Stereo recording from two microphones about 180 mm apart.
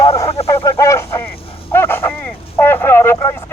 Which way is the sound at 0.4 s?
15° left (ahead or behind).